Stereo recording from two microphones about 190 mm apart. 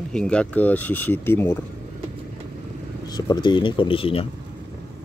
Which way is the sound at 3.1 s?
25° left (ahead or behind).